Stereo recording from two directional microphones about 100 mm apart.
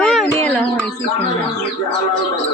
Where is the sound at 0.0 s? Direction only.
5° left (ahead or behind).